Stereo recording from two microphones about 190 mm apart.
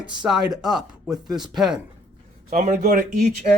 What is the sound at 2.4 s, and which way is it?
Speech, 40° right (ahead or behind).